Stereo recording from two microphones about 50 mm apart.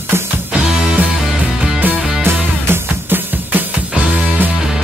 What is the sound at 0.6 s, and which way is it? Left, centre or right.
Music, centre.